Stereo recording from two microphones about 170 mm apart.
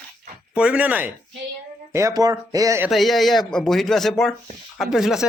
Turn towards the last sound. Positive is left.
turn(degrees=0)  # may be behind; listen again after turning